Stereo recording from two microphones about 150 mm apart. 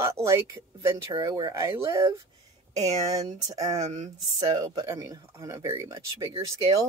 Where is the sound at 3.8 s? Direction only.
50° right (ahead or behind).